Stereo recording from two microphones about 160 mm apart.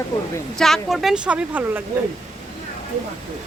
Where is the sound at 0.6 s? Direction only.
Centre (ahead or behind).